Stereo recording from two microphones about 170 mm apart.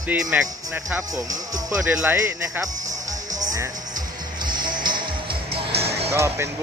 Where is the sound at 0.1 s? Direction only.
10° right (ahead or behind).